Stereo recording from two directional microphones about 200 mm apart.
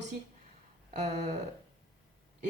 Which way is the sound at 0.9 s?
35° right (ahead or behind).